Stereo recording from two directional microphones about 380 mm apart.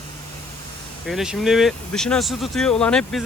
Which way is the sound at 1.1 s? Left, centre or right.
Centre.